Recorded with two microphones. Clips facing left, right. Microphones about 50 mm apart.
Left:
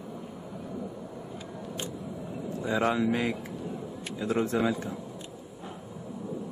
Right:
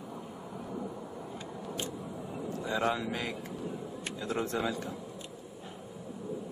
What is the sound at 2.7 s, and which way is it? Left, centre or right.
Speech, centre.